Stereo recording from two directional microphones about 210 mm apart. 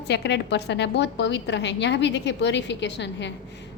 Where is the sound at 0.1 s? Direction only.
55° left (ahead or behind).